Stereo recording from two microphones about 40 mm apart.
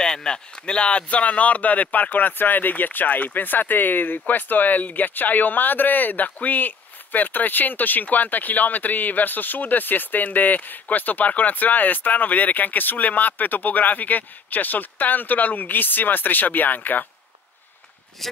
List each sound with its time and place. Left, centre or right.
0.0 s speech: centre; by 17.0 s left
18.2 s speech: centre